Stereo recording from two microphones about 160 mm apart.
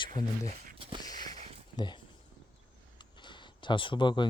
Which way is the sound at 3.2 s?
30° left (ahead or behind).